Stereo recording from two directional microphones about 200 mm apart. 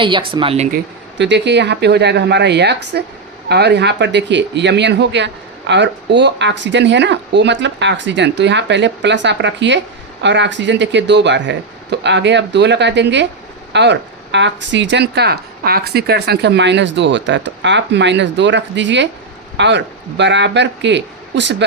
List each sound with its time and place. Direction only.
0.0 s speech: 25° right (ahead or behind)
1.2 s speech: 60° right (ahead or behind)